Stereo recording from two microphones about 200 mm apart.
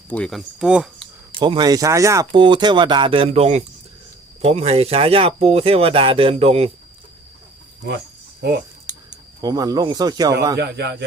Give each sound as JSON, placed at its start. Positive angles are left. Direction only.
{"t": 0.1, "sound": "speech", "side_deg": 5}
{"t": 1.3, "sound": "speech", "side_deg": -25}
{"t": 8.4, "sound": "speech", "side_deg": -55}
{"t": 9.4, "sound": "speech", "side_deg": -20}
{"t": 10.6, "sound": "speech", "side_deg": -55}